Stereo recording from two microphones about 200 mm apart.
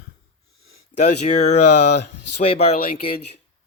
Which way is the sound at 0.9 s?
35° left (ahead or behind).